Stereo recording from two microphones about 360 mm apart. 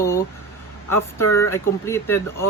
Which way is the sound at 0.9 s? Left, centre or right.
Centre.